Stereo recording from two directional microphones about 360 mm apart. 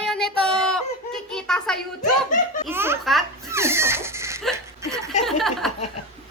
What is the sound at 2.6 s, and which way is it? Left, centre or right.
Baby laughter, centre.